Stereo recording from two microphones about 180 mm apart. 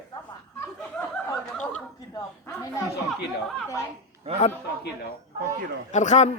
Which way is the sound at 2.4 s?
15° left (ahead or behind).